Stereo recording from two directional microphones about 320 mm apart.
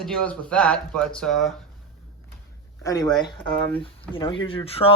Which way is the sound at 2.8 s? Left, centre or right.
Centre.